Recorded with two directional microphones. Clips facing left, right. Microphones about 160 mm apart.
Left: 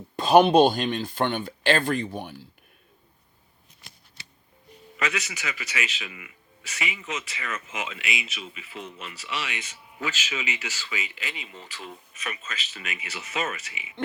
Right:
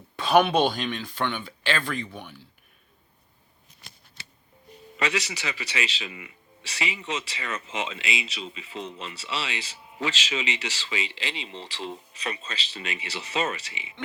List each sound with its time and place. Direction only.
0.2 s speech: 40° left (ahead or behind)
4.9 s a man's voice: 30° right (ahead or behind)